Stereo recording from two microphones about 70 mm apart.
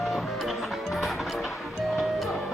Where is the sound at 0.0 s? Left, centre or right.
Centre.